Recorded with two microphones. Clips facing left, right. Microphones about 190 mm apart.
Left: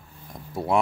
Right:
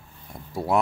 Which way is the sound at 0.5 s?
Centre (ahead or behind).